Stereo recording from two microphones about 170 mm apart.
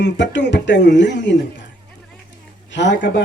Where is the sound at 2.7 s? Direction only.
90° left.